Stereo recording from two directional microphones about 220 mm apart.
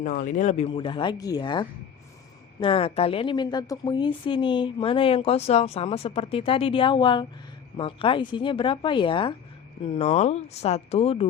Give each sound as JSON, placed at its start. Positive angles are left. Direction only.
{"t": 0.0, "sound": "a woman's voice", "side_deg": 35}